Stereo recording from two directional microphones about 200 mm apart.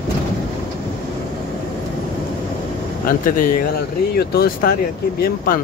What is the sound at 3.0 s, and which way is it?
Speech, 45° left (ahead or behind).